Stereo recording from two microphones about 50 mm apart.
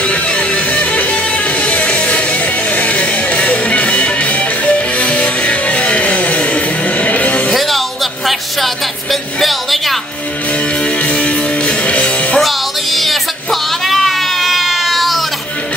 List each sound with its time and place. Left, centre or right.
0.0 s music: left
7.5 s a sound: centre
11.1 s music: left
12.4 s music: centre